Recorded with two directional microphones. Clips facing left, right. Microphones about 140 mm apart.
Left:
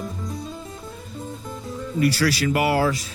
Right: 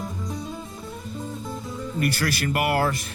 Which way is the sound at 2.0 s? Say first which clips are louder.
Left 5 dB; 50° right (ahead or behind).